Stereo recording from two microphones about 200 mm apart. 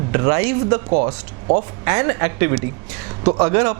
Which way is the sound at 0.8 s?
35° right (ahead or behind).